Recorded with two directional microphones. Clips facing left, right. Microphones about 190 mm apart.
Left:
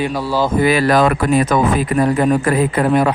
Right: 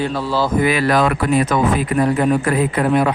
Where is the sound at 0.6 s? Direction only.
40° left (ahead or behind).